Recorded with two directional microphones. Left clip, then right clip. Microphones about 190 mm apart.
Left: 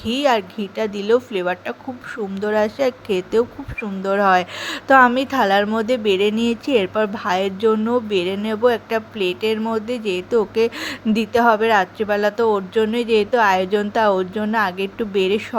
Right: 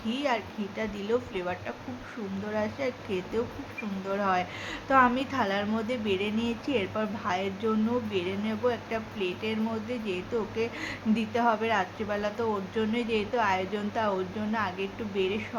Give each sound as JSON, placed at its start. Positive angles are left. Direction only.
{"t": 0.0, "sound": "speech", "side_deg": 50}